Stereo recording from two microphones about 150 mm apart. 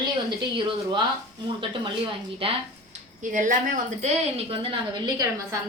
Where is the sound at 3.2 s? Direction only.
60° right (ahead or behind).